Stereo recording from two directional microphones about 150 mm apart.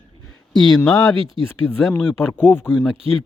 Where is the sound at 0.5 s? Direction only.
Centre (ahead or behind).